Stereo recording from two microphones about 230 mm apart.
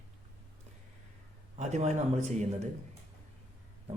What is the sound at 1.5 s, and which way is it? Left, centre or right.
Speech, right.